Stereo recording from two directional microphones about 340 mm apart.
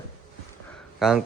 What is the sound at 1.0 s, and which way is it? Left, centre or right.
Speech, centre.